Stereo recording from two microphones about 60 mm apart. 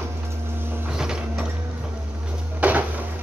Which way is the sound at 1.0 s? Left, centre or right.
Centre.